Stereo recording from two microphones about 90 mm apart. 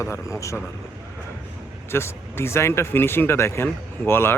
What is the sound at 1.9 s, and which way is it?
Speech, 30° left (ahead or behind).